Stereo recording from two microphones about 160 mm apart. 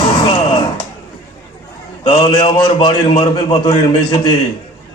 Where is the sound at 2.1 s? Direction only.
35° left (ahead or behind).